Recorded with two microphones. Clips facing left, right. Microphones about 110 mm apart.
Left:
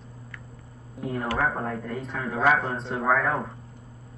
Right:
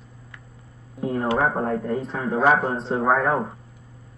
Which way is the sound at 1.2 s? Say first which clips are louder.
Right 5 dB; 20° right (ahead or behind).